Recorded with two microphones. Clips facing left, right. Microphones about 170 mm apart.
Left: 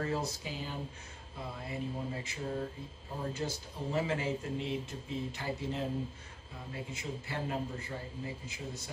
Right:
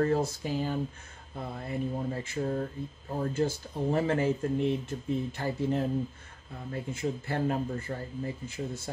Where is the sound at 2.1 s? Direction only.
50° right (ahead or behind).